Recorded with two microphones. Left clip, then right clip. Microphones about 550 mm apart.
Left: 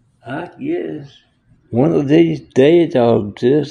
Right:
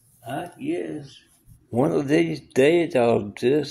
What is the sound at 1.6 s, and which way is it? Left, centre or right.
Speech, right.